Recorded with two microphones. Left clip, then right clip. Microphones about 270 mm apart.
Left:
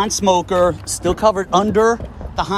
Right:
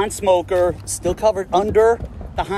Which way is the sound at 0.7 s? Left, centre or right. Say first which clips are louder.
Left 3 dB; left.